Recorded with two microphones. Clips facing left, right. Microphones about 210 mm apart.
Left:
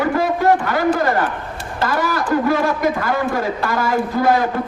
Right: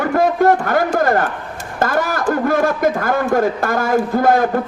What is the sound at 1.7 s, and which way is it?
A man's voice, 50° right (ahead or behind).